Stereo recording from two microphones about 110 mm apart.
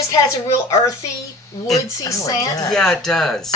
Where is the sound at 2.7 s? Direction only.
5° left (ahead or behind).